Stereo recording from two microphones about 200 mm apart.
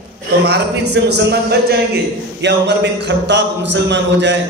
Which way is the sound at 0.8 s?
60° right (ahead or behind).